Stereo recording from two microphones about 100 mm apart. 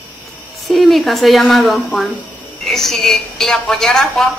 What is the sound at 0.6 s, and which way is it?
A woman's voice, centre (ahead or behind).